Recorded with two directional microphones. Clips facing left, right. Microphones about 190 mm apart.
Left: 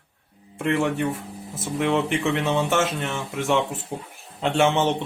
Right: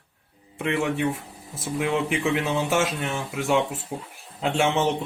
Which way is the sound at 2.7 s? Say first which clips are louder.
Left 1 dB; 5° right (ahead or behind).